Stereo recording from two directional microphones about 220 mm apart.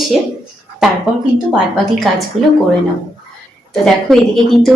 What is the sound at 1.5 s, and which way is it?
Speech, centre (ahead or behind).